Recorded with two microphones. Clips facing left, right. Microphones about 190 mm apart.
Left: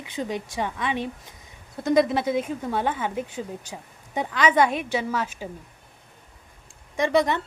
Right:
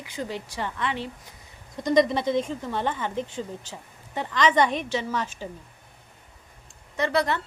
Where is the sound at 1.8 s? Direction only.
5° left (ahead or behind).